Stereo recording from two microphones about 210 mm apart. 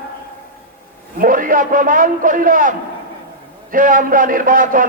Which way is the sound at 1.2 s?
40° right (ahead or behind).